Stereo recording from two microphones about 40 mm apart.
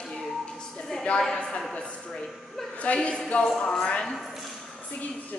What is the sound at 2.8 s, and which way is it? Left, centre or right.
Speech, left.